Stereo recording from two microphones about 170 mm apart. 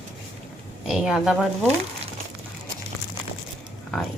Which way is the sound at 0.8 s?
5° right (ahead or behind).